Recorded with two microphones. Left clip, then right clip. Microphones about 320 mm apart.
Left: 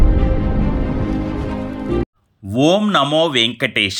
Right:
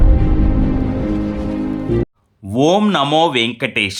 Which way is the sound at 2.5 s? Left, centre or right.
Centre.